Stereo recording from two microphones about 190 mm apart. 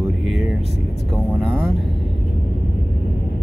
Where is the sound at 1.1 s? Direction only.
Centre (ahead or behind).